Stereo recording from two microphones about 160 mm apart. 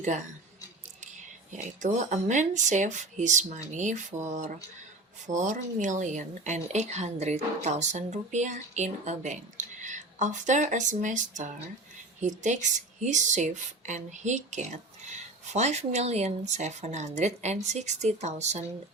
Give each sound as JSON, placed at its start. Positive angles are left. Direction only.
{"t": 1.0, "sound": "a woman's voice", "side_deg": -50}